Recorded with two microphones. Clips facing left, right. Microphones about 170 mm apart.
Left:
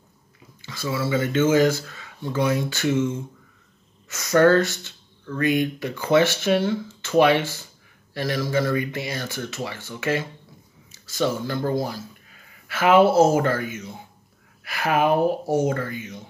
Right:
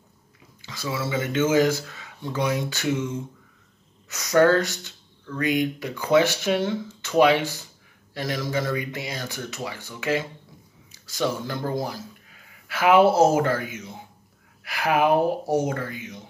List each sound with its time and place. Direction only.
0.6 s a sound: 15° right (ahead or behind)
1.1 s speech: 15° right (ahead or behind)
4.1 s speech: 15° right (ahead or behind)